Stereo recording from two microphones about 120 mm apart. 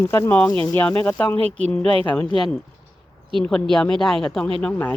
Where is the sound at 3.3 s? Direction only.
5° left (ahead or behind).